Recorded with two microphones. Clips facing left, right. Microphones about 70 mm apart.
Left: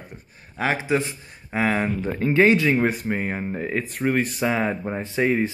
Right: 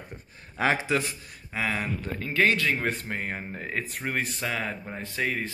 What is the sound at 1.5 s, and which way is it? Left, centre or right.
Speech, left.